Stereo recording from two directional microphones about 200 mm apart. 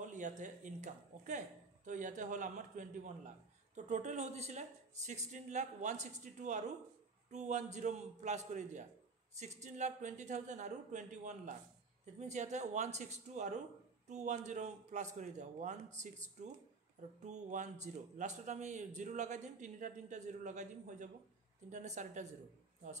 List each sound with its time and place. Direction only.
0.0 s a man's voice: 40° right (ahead or behind)